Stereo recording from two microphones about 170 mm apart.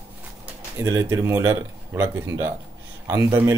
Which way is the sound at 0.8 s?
20° right (ahead or behind).